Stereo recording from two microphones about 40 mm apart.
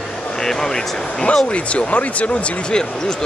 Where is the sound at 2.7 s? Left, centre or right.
Centre.